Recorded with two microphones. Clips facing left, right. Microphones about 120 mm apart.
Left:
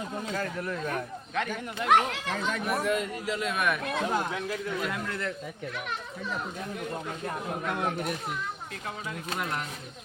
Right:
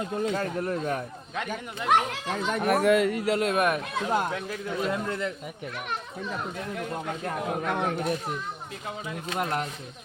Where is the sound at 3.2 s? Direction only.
60° right (ahead or behind).